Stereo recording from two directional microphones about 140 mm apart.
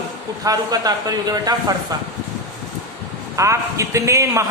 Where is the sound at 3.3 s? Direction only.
20° right (ahead or behind).